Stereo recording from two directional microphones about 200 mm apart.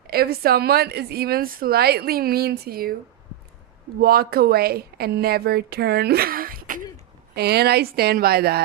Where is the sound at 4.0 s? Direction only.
50° right (ahead or behind).